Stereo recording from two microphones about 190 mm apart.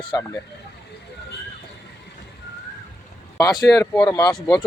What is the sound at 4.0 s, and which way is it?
Speech, 20° left (ahead or behind).